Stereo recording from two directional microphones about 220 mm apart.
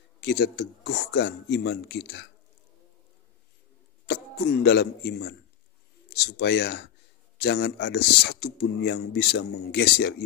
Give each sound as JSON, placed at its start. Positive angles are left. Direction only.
{"t": 0.2, "sound": "speech", "side_deg": 50}
{"t": 4.6, "sound": "speech", "side_deg": 50}